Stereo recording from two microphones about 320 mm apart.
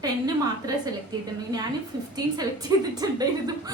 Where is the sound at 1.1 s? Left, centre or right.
Centre.